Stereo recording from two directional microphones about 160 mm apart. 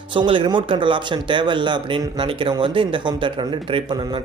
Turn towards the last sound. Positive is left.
turn(degrees=-30)  # may be behind; listen again after turning